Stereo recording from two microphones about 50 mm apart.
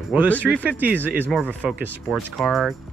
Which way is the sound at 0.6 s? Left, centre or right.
Right.